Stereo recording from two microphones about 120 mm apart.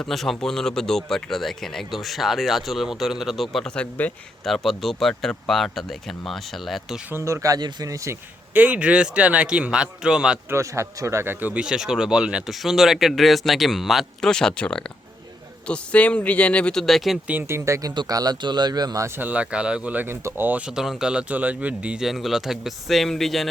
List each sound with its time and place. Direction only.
0.0 s speech: centre (ahead or behind)
7.1 s speech: 25° right (ahead or behind)
8.5 s speech: 10° right (ahead or behind)
10.5 s speech: 25° right (ahead or behind); by 17.2 s centre (ahead or behind)
17.2 s speech: 20° right (ahead or behind); by 19.0 s 35° right (ahead or behind)
19.0 s speech: 15° right (ahead or behind); by 23.5 s centre (ahead or behind)